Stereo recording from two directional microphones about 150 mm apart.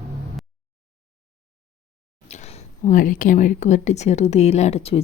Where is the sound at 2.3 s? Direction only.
45° left (ahead or behind).